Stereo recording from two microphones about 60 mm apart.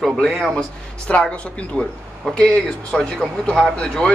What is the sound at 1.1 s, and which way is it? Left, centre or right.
Speech, centre.